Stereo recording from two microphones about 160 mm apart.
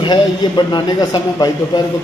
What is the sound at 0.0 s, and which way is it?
Speech, 25° left (ahead or behind).